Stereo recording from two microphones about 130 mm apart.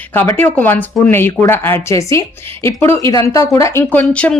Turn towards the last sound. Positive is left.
turn(degrees=10)  # may be behind; listen again after turning